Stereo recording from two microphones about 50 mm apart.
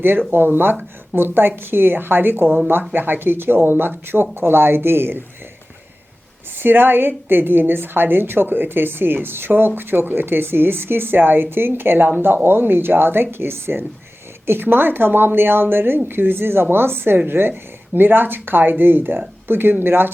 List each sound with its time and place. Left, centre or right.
0.0 s a woman's voice: right
6.6 s a woman's voice: right